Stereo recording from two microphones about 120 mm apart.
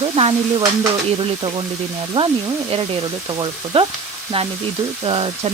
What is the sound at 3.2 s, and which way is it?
Speech, 40° right (ahead or behind).